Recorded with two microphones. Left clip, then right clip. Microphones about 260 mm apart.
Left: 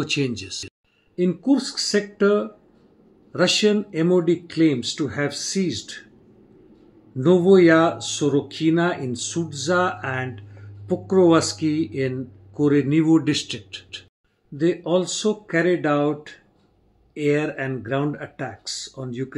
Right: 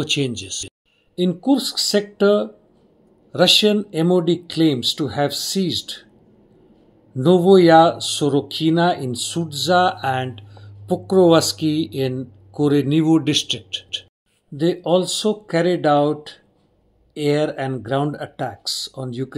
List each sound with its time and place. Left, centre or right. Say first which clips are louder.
0.0 s speech: right 3 dB; centre
7.2 s speech: right 2 dB; centre
13.7 s speech: right 9 dB; centre
14.6 s speech: right 3 dB; centre